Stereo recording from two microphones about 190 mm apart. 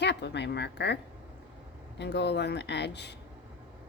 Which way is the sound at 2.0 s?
60° left (ahead or behind).